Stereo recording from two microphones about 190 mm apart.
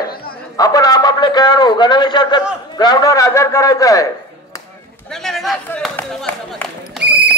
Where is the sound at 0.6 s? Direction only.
20° left (ahead or behind).